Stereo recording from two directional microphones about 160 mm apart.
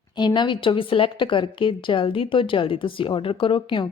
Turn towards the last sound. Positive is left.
turn(degrees=30)  # may be behind; listen again after turning